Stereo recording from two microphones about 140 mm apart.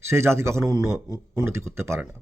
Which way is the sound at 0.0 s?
20° right (ahead or behind).